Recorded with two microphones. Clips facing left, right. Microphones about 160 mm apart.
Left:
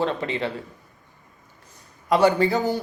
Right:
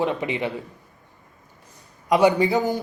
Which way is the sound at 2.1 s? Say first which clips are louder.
Right 1 dB; 15° right (ahead or behind).